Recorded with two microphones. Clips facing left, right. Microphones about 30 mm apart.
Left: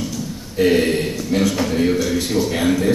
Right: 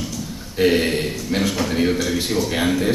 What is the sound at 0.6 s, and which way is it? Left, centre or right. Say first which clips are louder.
A man's voice: left 2 dB; centre.